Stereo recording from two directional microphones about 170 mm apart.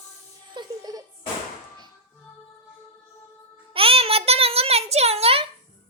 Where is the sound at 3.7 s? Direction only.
35° right (ahead or behind).